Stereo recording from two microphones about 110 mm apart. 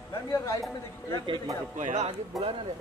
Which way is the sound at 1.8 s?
90° right.